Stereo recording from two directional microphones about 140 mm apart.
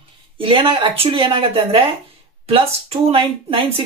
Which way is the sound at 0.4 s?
40° right (ahead or behind).